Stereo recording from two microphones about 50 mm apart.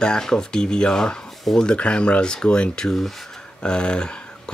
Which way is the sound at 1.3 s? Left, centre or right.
Centre.